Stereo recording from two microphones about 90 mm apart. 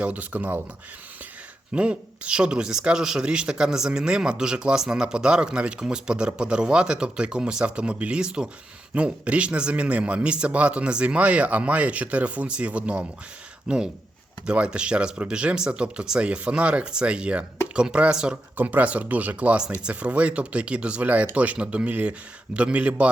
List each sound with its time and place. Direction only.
0.0 s speech: 15° right (ahead or behind)
1.7 s speech: 10° right (ahead or behind)
18.5 s speech: 20° right (ahead or behind)